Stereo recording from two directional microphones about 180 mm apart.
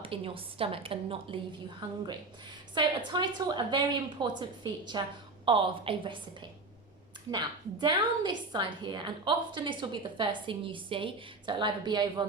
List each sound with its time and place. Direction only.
0.0 s a woman's voice: 30° right (ahead or behind)